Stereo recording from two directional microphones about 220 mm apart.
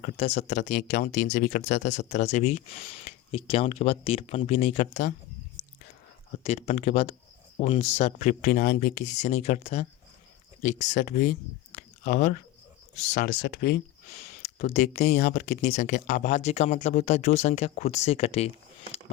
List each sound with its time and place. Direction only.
0.0 s speech: 30° left (ahead or behind)
6.4 s speech: 30° left (ahead or behind); by 13.8 s 45° left (ahead or behind)
14.6 s speech: 30° left (ahead or behind)